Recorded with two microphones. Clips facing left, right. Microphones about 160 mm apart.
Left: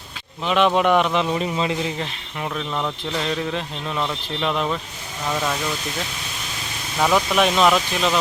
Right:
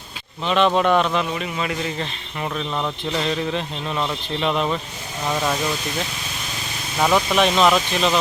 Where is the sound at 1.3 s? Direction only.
30° left (ahead or behind).